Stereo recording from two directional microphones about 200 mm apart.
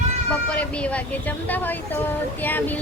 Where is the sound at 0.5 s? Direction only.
5° left (ahead or behind).